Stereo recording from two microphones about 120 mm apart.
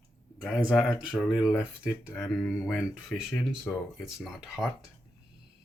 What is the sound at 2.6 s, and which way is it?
Speech, 5° right (ahead or behind).